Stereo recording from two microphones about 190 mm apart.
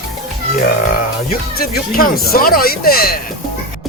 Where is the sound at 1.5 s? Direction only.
50° left (ahead or behind).